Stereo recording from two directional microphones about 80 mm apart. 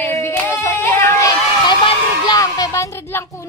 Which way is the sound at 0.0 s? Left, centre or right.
Left.